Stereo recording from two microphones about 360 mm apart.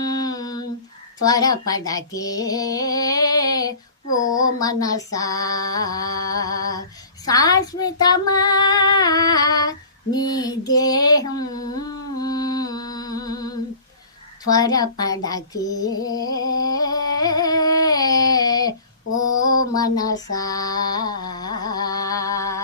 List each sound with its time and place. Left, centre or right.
0.0 s a sound: centre
1.2 s speech: centre
14.4 s female singing: centre
19.1 s mantra: centre
21.6 s music: centre